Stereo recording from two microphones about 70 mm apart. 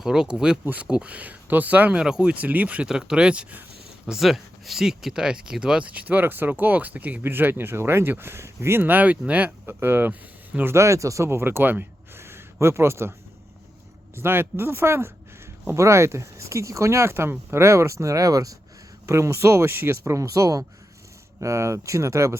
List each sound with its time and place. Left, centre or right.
0.0 s speech: centre
0.6 s speech: right
8.8 s speech: right
10.7 s speech: right
11.3 s speech: right
14.2 s speech: right
19.0 s speech: right